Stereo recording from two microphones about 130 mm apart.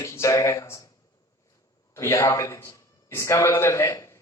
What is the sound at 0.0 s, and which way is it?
Speech, 25° left (ahead or behind).